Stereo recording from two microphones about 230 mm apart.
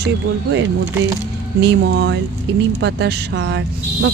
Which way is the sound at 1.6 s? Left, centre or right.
Right.